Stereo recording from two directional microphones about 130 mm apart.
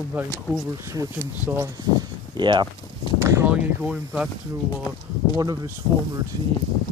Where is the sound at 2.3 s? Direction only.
35° right (ahead or behind).